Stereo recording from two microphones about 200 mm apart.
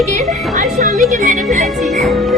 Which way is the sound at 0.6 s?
35° right (ahead or behind).